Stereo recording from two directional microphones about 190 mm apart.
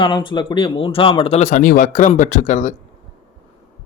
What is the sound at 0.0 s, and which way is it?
A man's voice, 25° left (ahead or behind).